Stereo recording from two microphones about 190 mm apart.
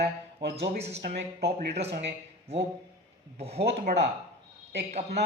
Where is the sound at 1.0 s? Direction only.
60° right (ahead or behind).